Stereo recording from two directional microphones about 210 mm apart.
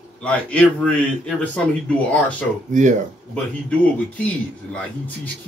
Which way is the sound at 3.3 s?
5° left (ahead or behind).